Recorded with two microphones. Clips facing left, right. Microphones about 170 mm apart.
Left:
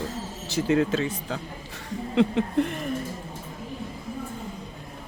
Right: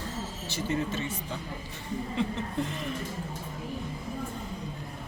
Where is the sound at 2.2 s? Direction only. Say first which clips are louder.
Left 10 dB; 65° left (ahead or behind).